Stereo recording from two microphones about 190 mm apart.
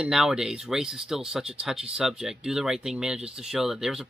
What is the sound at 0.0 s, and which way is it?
Speech, 5° right (ahead or behind).